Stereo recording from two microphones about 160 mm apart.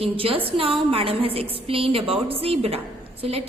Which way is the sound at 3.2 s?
40° right (ahead or behind).